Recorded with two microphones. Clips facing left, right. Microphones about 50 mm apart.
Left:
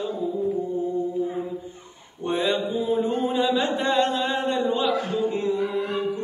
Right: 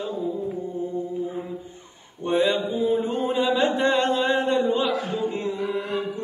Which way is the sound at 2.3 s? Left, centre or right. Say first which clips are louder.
Right 3 dB; right.